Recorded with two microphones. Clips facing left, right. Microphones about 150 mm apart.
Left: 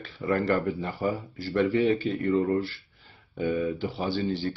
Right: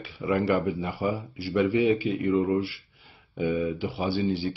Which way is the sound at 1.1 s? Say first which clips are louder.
Left 1 dB; centre (ahead or behind).